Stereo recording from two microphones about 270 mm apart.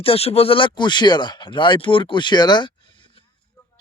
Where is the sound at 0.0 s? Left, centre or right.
Left.